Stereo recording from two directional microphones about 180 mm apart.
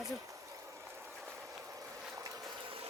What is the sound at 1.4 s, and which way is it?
Vehicle, 15° right (ahead or behind).